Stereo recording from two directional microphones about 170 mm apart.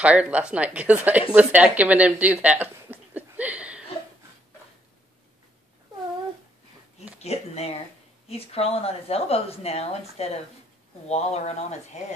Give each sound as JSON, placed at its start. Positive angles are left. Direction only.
{"t": 0.0, "sound": "a woman's voice", "side_deg": -10}
{"t": 7.2, "sound": "speech", "side_deg": 40}